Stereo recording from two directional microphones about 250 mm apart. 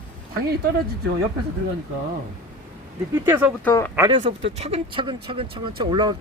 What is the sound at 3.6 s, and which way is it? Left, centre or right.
Speech, centre.